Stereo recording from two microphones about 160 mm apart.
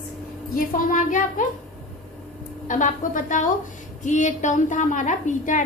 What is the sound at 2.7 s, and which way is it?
A woman's voice, 50° left (ahead or behind).